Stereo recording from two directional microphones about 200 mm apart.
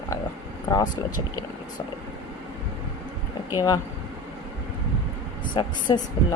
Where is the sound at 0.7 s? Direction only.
15° left (ahead or behind).